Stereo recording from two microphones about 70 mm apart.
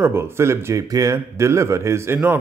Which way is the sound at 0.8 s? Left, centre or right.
Right.